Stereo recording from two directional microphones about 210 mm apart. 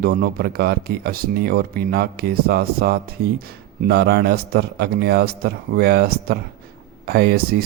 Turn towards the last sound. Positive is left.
turn(degrees=-50)  # may be behind; listen again after turning